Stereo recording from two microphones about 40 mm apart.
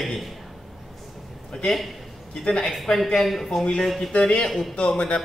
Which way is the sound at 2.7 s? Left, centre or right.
Centre.